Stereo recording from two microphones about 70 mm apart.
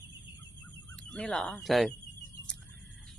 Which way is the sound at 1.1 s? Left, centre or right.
Centre.